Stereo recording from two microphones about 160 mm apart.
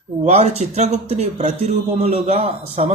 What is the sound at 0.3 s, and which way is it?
A man's voice, 40° right (ahead or behind).